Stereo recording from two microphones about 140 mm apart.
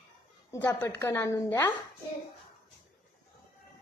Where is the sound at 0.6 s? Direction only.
15° left (ahead or behind).